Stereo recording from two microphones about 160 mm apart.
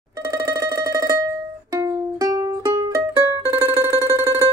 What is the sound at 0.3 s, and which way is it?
Music, 20° right (ahead or behind).